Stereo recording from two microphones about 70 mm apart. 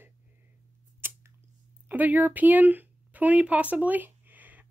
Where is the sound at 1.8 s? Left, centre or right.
Right.